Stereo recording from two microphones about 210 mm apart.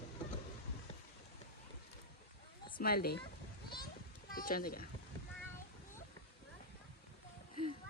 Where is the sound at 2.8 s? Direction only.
45° left (ahead or behind).